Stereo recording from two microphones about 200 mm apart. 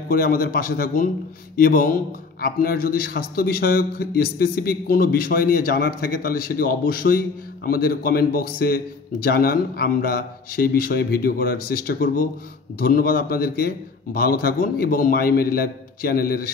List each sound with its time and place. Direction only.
0.1 s a man's voice: 45° left (ahead or behind)